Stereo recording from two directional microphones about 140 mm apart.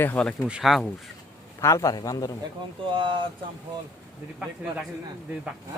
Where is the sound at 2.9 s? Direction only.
35° right (ahead or behind).